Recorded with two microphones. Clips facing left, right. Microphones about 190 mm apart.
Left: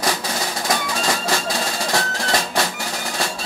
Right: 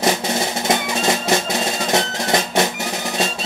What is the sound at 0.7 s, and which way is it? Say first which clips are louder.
Music: right 3 dB; 20° right (ahead or behind).